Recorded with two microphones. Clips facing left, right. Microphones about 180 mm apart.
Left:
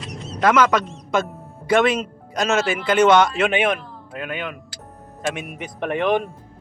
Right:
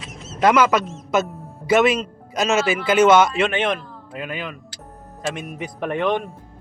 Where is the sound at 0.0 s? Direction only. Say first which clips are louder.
Left 4 dB; centre (ahead or behind).